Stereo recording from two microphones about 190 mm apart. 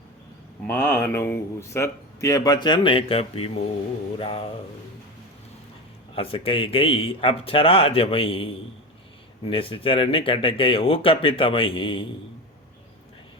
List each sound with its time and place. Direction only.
0.7 s speech: 15° left (ahead or behind); by 4.4 s 30° left (ahead or behind)
6.1 s speech: 30° left (ahead or behind)